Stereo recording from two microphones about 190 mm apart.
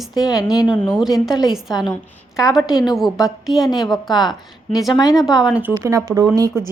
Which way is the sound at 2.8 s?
Centre (ahead or behind).